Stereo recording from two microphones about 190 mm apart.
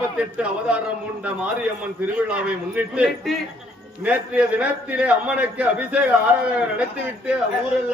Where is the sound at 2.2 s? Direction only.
5° right (ahead or behind).